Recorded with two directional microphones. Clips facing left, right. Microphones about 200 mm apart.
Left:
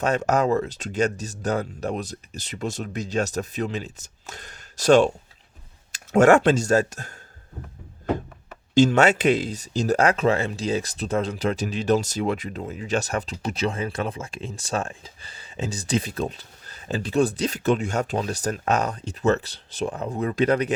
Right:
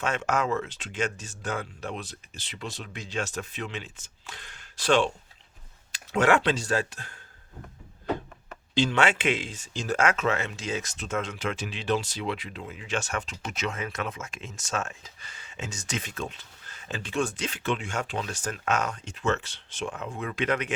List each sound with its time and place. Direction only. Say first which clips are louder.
0.0 s speech: left 6 dB; 40° left (ahead or behind)
8.7 s speech: left 7 dB; 45° left (ahead or behind)